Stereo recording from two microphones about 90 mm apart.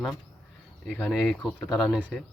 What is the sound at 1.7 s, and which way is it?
Speech, 5° right (ahead or behind).